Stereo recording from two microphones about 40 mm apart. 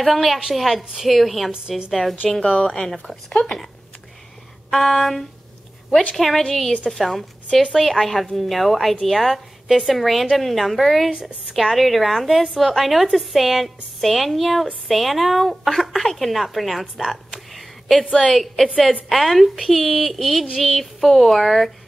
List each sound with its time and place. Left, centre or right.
0.0 s a woman's voice: centre
1.5 s a woman's voice: right
1.9 s a woman's voice: centre
2.2 s speech: centre
4.6 s a woman's voice: centre
11.1 s a woman's voice: right
11.5 s a woman's voice: centre
17.6 s a sound: centre
18.3 s a woman's voice: centre